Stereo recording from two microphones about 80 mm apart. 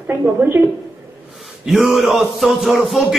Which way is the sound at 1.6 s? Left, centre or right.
Centre.